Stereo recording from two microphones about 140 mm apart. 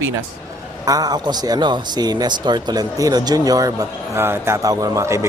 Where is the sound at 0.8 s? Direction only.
25° right (ahead or behind).